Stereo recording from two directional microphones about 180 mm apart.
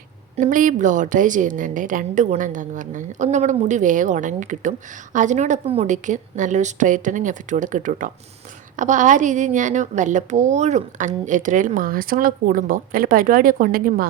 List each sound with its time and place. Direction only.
0.3 s a woman's voice: 45° right (ahead or behind)